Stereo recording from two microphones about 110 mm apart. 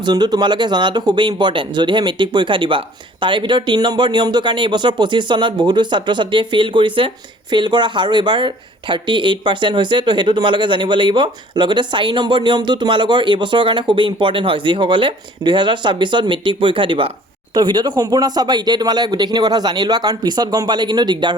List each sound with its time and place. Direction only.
0.0 s speech: 40° right (ahead or behind)